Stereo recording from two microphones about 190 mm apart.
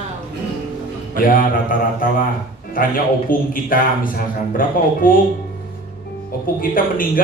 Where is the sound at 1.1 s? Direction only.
45° left (ahead or behind).